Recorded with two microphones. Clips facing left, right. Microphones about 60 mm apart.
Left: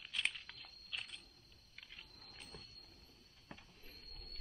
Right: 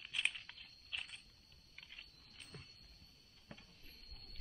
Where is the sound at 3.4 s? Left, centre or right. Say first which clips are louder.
Left 2 dB; centre.